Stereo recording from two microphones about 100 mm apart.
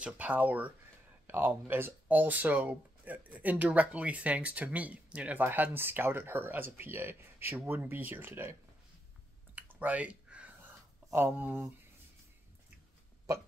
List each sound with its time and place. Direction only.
0.0 s speech: 15° right (ahead or behind)
9.6 s a sound: 15° right (ahead or behind)
11.1 s speech: 20° right (ahead or behind)